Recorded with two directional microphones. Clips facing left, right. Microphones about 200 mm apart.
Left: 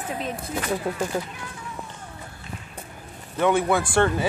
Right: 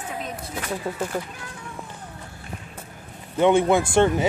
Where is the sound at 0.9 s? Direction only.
Centre (ahead or behind).